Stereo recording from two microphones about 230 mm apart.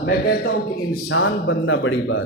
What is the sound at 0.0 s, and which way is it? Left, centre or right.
Speech, left.